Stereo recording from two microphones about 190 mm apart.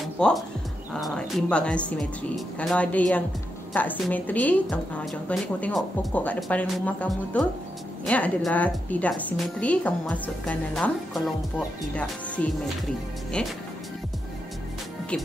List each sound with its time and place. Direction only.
0.0 s music: centre (ahead or behind)
0.9 s a woman's voice: centre (ahead or behind)
12.4 s a woman's voice: 5° left (ahead or behind)